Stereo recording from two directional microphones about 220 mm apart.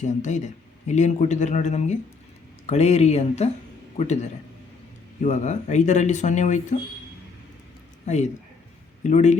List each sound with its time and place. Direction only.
0.0 s speech: 30° left (ahead or behind)
9.0 s speech: 30° left (ahead or behind)